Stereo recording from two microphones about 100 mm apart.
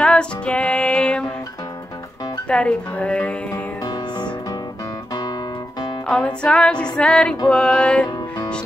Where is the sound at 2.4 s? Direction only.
10° left (ahead or behind).